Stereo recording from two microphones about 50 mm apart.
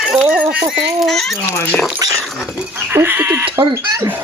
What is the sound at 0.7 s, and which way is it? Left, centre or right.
Speech, centre.